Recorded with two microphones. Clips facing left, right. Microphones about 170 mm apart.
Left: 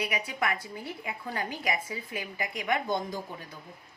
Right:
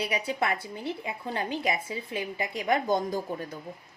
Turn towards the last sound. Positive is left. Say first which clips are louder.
# right 6 dB
turn(degrees=-45)  # may be behind; listen again after turning